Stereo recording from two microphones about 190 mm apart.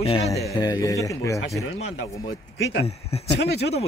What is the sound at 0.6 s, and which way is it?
A man's voice, 20° left (ahead or behind).